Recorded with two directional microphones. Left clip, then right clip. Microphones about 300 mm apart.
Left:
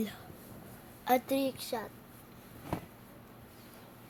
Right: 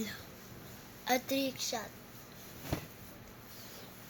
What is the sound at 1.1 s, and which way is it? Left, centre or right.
Child singing, centre.